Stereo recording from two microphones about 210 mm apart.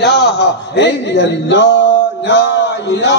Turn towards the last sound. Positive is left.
turn(degrees=55)  # may be behind; listen again after turning